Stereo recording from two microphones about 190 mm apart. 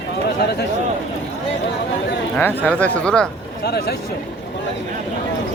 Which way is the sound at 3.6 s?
55° left (ahead or behind).